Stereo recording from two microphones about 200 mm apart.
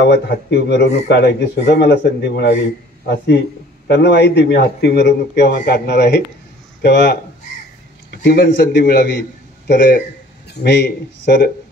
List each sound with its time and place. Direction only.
0.0 s a man's voice: 55° left (ahead or behind)